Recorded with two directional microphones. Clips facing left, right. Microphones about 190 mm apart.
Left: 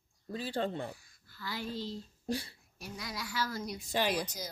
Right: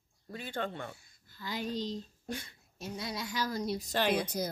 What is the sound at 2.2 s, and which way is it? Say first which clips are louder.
Speech: left 5 dB; 35° left (ahead or behind).